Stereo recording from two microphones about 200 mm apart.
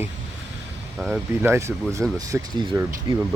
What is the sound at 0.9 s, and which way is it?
Speech, centre (ahead or behind).